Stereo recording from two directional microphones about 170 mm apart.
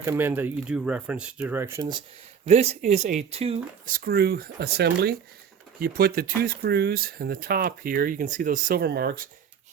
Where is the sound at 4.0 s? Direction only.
65° right (ahead or behind).